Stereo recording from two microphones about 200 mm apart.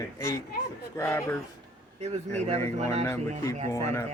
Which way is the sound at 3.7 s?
15° left (ahead or behind).